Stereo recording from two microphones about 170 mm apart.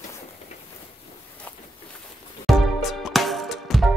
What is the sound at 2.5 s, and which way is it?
Music, centre (ahead or behind).